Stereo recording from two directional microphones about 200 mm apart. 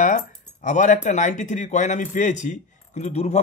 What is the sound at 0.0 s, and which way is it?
A man's voice, 40° left (ahead or behind).